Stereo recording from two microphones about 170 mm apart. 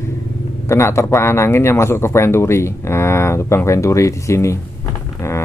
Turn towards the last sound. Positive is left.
turn(degrees=15)  # may be behind; listen again after turning